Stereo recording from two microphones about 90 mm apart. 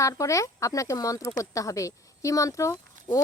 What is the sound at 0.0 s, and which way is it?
Speech, 35° left (ahead or behind).